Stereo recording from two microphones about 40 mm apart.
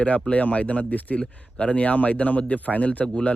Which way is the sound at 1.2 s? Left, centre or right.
Left.